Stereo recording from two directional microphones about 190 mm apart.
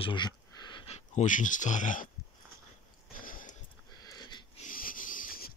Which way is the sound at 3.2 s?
45° left (ahead or behind).